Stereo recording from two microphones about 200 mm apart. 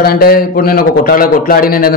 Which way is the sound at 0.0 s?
50° left (ahead or behind).